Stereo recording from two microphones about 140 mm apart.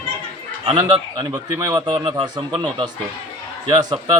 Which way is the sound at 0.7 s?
30° right (ahead or behind).